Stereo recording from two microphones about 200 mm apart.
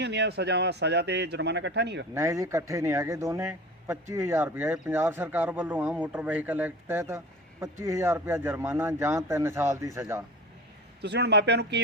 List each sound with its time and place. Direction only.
0.0 s speech: 55° right (ahead or behind)
2.1 s a man's voice: 15° right (ahead or behind)
11.0 s speech: 55° right (ahead or behind)